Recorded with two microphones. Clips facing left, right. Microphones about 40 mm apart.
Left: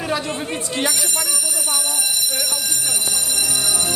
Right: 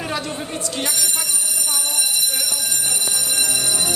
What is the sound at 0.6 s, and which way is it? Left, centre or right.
Speech, left.